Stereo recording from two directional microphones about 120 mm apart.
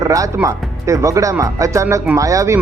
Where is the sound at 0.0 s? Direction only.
25° right (ahead or behind).